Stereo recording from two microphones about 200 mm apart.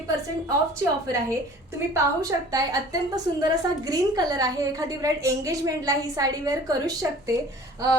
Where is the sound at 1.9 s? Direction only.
15° right (ahead or behind).